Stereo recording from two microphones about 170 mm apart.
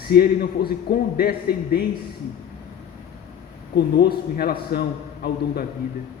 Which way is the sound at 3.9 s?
65° left (ahead or behind).